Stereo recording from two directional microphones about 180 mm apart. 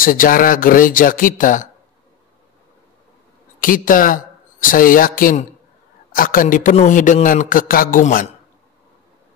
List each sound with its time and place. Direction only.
0.0 s a man's voice: 50° left (ahead or behind)
3.5 s a man's voice: 50° left (ahead or behind)